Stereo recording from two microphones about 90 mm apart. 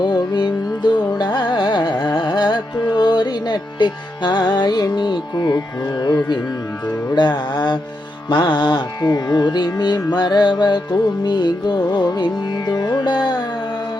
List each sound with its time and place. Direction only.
0.0 s music: 55° left (ahead or behind)
1.2 s carnatic music: 55° left (ahead or behind)
7.2 s music: 55° left (ahead or behind)